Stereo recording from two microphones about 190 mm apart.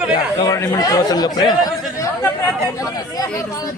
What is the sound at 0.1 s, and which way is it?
Speech, 20° left (ahead or behind).